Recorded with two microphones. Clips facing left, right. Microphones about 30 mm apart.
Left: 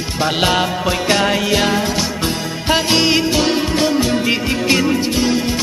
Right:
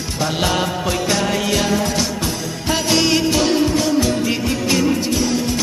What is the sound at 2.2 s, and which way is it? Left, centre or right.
Music, left.